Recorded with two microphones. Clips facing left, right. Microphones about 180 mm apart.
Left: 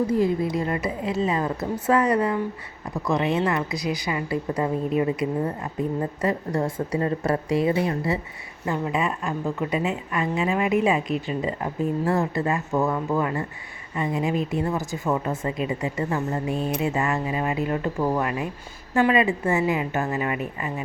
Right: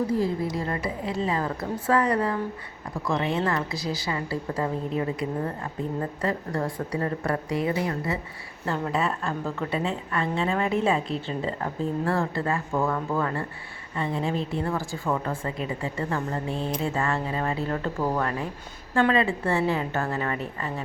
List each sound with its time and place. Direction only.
0.1 s a woman's voice: 20° left (ahead or behind)
8.6 s a woman's voice: 10° left (ahead or behind)